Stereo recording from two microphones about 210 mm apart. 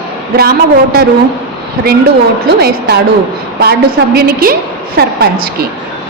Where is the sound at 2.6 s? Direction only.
50° right (ahead or behind).